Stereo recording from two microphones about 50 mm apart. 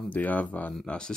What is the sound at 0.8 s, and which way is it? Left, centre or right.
Speech, left.